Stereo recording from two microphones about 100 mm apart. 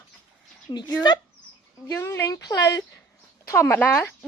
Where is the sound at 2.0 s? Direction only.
25° left (ahead or behind).